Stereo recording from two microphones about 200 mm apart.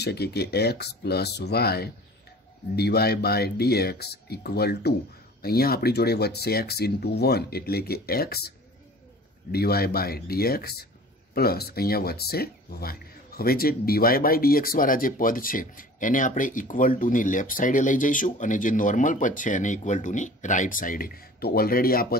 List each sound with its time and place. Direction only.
0.0 s speech: 55° left (ahead or behind)